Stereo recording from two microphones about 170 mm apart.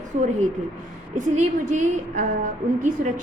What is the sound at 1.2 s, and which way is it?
A woman's voice, 45° right (ahead or behind).